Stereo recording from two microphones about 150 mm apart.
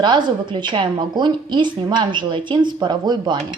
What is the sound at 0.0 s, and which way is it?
A woman's voice, 30° right (ahead or behind).